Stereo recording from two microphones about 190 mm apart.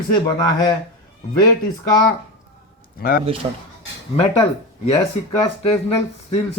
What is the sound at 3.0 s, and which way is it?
Speech, 50° left (ahead or behind).